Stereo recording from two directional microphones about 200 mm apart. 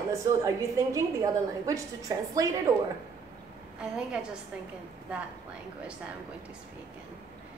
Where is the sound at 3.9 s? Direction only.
5° right (ahead or behind).